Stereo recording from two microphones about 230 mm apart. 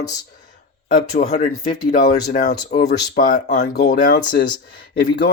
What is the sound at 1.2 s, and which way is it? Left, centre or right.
Speech, left.